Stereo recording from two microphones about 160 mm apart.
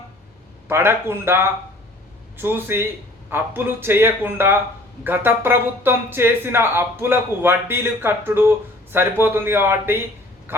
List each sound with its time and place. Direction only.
0.7 s speech: 15° right (ahead or behind)